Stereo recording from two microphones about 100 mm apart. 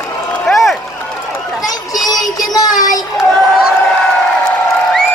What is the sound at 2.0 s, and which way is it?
Music, 40° left (ahead or behind).